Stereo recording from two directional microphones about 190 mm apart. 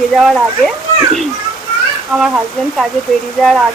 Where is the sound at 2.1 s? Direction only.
5° right (ahead or behind).